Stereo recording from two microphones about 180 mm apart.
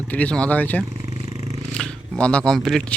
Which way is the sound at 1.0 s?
20° right (ahead or behind).